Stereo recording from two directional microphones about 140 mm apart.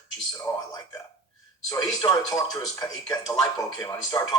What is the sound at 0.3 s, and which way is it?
Speech, 25° left (ahead or behind).